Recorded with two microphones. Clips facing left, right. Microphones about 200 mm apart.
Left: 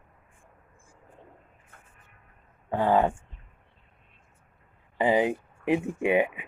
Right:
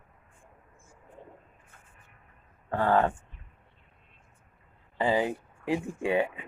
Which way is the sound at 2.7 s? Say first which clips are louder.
Left 2 dB; 15° left (ahead or behind).